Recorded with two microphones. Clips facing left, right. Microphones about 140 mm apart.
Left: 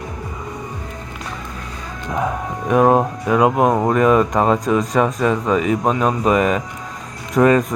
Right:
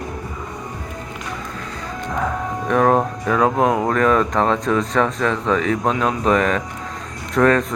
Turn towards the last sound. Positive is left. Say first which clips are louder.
# left 2 dB
turn(degrees=10)  # may be behind; listen again after turning